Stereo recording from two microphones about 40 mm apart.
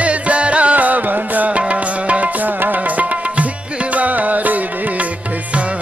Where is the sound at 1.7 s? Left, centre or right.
Right.